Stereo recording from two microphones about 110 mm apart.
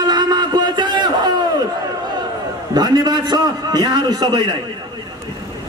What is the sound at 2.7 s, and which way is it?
A man's voice, 40° right (ahead or behind).